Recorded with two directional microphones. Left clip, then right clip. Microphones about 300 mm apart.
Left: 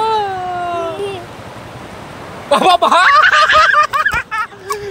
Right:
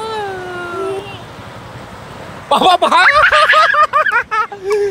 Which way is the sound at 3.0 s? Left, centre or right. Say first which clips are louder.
Even; centre.